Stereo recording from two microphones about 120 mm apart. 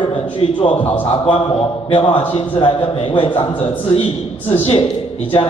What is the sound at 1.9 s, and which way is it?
A man's voice, 45° left (ahead or behind).